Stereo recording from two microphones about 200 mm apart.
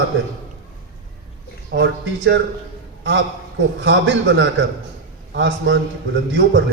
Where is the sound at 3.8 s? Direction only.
65° right (ahead or behind).